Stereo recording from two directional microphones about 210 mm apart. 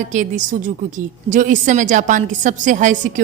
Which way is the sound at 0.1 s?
35° right (ahead or behind).